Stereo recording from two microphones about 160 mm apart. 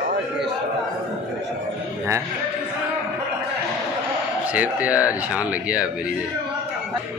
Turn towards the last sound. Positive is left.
turn(degrees=-5)  # may be behind; listen again after turning